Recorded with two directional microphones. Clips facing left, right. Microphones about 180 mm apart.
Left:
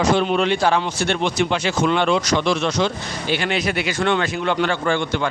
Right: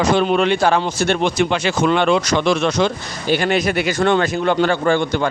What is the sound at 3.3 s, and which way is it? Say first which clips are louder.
A man's voice: right 5 dB; 45° right (ahead or behind).